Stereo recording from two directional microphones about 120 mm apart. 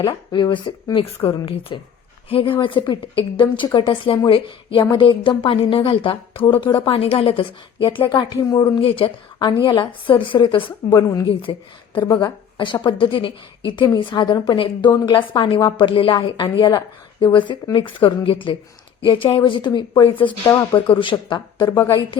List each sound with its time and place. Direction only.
0.0 s a woman's voice: 35° left (ahead or behind); by 7.9 s 50° left (ahead or behind)
8.1 s a woman's voice: 30° left (ahead or behind)
8.8 s a woman's voice: 50° left (ahead or behind)
9.4 s a woman's voice: 40° left (ahead or behind)